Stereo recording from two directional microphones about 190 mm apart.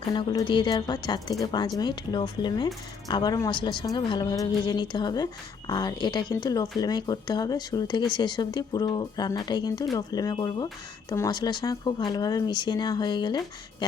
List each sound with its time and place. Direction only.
0.1 s a woman's voice: 25° left (ahead or behind)